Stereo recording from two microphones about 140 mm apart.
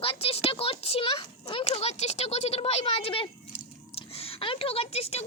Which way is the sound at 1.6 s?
50° left (ahead or behind).